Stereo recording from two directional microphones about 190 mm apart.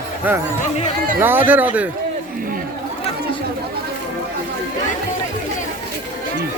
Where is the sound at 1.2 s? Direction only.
10° right (ahead or behind).